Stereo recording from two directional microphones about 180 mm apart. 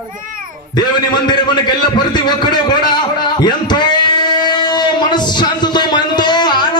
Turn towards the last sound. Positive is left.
turn(degrees=25)  # may be behind; listen again after turning